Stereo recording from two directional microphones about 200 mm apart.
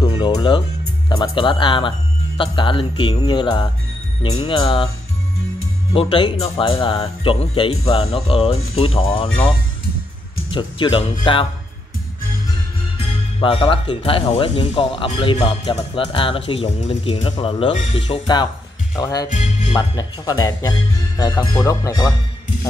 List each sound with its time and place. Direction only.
0.0 s speech: 20° left (ahead or behind)
5.9 s speech: 25° left (ahead or behind)
10.5 s speech: 25° left (ahead or behind)
13.0 s speech: 25° left (ahead or behind)
19.3 s speech: 35° left (ahead or behind)
19.7 s speech: 20° left (ahead or behind)